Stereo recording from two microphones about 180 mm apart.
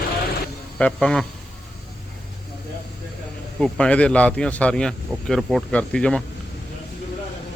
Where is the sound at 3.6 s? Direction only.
5° left (ahead or behind).